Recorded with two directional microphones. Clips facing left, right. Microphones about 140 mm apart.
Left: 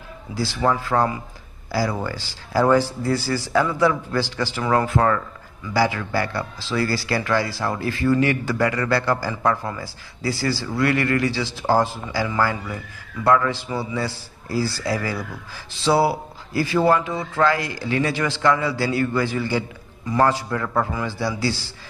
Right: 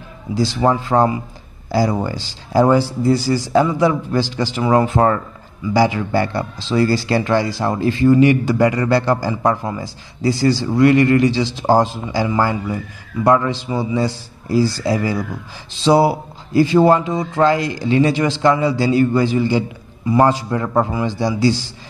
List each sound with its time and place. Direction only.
0.3 s speech: 20° right (ahead or behind)